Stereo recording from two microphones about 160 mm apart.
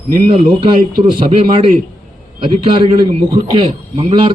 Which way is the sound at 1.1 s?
30° right (ahead or behind).